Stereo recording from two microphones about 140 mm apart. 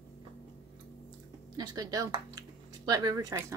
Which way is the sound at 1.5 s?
30° right (ahead or behind).